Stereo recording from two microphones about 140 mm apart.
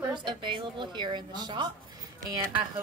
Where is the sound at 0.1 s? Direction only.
35° right (ahead or behind).